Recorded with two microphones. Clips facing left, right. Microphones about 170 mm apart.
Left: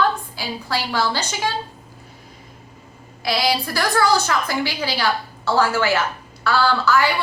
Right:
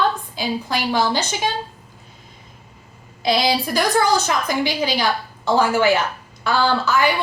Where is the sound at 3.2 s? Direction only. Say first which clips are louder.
Right 2 dB; 20° right (ahead or behind).